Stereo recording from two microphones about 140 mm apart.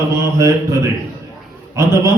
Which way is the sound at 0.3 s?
20° right (ahead or behind).